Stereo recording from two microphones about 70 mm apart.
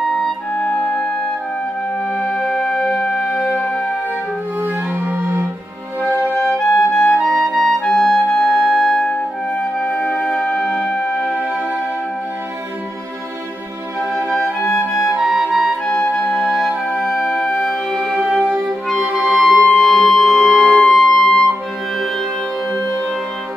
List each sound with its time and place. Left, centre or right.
0.0 s music: centre
2.1 s music: centre
4.6 s music: right
6.3 s music: centre
7.2 s clarinet: centre
9.6 s music: centre
14.3 s music: centre
15.2 s music: centre
15.9 s music: centre
18.4 s clarinet: right
19.3 s music: centre